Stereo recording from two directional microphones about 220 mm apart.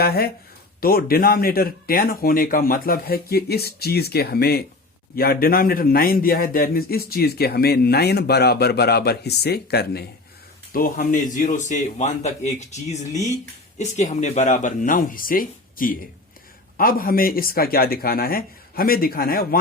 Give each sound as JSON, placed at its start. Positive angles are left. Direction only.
{"t": 0.0, "sound": "a man's voice", "side_deg": 45}